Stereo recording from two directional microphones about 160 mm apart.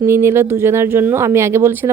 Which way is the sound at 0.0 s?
15° right (ahead or behind).